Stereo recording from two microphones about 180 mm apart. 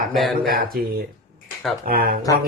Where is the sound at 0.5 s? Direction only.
55° right (ahead or behind).